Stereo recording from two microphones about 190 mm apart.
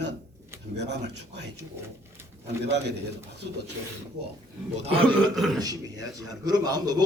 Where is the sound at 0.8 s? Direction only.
65° right (ahead or behind).